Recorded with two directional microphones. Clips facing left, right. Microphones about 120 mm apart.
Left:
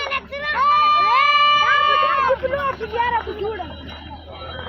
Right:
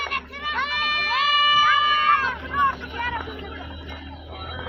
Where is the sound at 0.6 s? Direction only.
40° left (ahead or behind).